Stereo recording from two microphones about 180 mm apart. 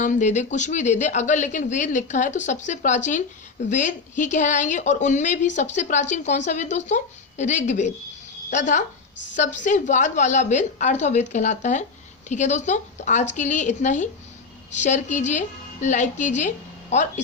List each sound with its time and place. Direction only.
0.0 s a woman's voice: 45° left (ahead or behind)